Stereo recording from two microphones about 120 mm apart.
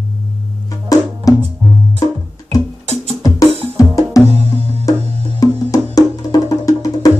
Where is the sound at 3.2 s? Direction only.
25° left (ahead or behind).